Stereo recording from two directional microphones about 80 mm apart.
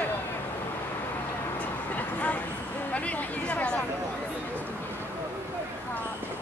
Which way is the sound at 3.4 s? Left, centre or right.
Centre.